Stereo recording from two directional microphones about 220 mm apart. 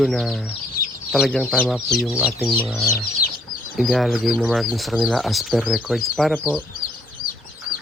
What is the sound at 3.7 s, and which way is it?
Speech, centre (ahead or behind).